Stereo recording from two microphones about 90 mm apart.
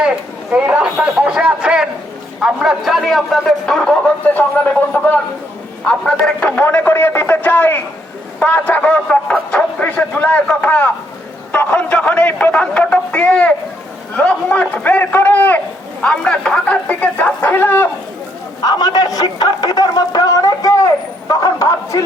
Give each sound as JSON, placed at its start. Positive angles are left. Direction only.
{"t": 0.5, "sound": "a man's voice", "side_deg": -15}
{"t": 3.8, "sound": "a man's voice", "side_deg": 15}
{"t": 6.6, "sound": "a man's voice", "side_deg": 25}
{"t": 18.6, "sound": "a man's voice", "side_deg": 50}